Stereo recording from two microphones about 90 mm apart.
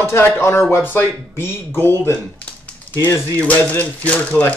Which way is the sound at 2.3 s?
15° left (ahead or behind).